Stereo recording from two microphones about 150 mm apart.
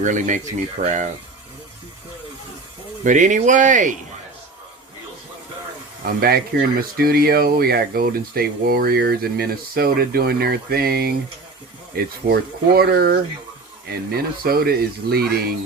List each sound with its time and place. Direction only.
0.0 s speech: 55° right (ahead or behind)
3.0 s speech: 55° right (ahead or behind)
6.1 s speech: 90° right